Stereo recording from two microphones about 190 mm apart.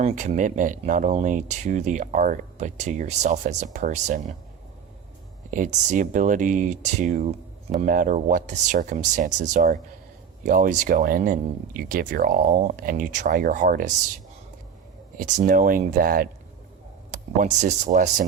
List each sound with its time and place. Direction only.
0.0 s speech: 40° right (ahead or behind)
5.5 s speech: 40° right (ahead or behind)
15.2 s speech: 40° right (ahead or behind)